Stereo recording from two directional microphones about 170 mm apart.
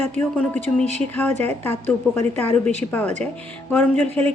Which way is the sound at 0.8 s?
40° right (ahead or behind).